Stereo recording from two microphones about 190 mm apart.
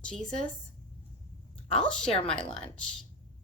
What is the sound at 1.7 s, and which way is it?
Speech, 5° left (ahead or behind).